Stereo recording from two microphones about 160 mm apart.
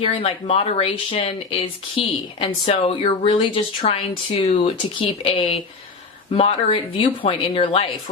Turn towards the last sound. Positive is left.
turn(degrees=35)  # may be behind; listen again after turning